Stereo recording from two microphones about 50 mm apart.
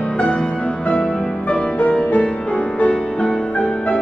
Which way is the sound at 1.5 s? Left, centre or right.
Left.